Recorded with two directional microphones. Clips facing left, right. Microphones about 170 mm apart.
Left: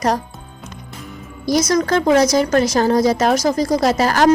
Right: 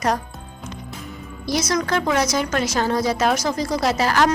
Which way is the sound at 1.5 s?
40° left (ahead or behind).